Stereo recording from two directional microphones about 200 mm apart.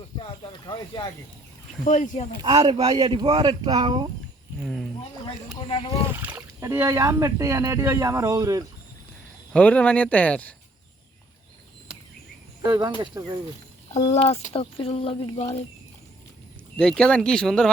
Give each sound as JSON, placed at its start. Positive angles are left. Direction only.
{"t": 0.2, "sound": "a sound", "side_deg": 25}
{"t": 1.8, "sound": "speech", "side_deg": 40}
{"t": 2.4, "sound": "speech", "side_deg": -25}
{"t": 4.6, "sound": "speech", "side_deg": 0}
{"t": 5.5, "sound": "speech", "side_deg": 25}
{"t": 6.1, "sound": "speech", "side_deg": -10}
{"t": 9.5, "sound": "speech", "side_deg": 5}
{"t": 12.6, "sound": "speech", "side_deg": -20}
{"t": 14.1, "sound": "speech", "side_deg": 35}
{"t": 16.7, "sound": "speech", "side_deg": 5}